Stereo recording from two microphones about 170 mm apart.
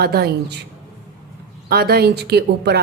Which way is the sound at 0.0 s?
65° right (ahead or behind).